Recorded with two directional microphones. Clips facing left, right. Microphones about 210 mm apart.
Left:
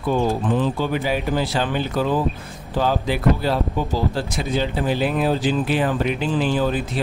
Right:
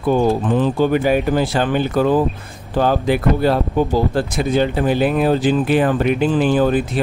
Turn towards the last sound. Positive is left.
turn(degrees=-55)  # may be behind; listen again after turning